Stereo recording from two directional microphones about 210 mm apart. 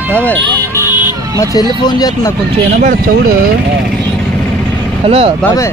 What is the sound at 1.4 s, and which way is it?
Speech, 15° left (ahead or behind).